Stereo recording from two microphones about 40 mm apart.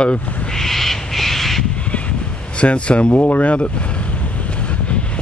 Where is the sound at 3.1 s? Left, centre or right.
Left.